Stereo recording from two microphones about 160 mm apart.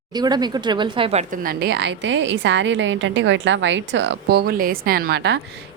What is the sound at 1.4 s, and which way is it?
Speech, 85° right.